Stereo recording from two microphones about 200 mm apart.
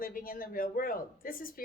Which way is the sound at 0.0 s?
45° left (ahead or behind).